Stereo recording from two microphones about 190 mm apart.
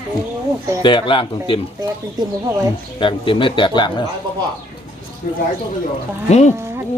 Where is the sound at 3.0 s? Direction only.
25° left (ahead or behind).